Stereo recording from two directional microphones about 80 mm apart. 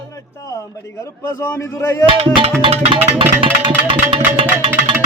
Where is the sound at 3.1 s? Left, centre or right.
Right.